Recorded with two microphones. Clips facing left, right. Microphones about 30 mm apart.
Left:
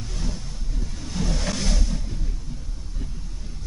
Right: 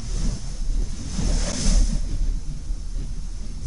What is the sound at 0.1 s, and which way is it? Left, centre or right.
Wind noise, centre.